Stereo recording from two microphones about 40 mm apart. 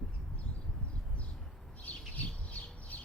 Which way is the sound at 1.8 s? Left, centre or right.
Left.